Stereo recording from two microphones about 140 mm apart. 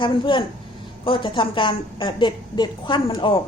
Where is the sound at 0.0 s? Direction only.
35° left (ahead or behind).